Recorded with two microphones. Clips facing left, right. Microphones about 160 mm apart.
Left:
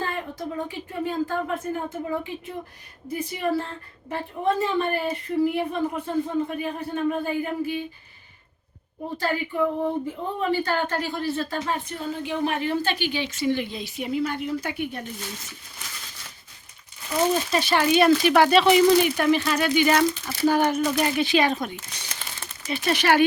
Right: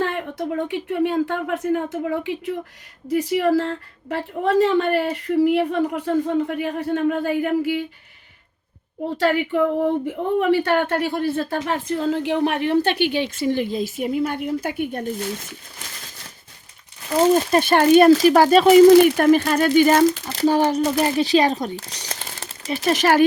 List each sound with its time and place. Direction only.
0.0 s a woman's voice: 70° right (ahead or behind)
9.1 s a woman's voice: 75° right (ahead or behind); by 15.5 s 50° right (ahead or behind)
17.3 s speech: 50° right (ahead or behind)
20.2 s speech: 30° right (ahead or behind)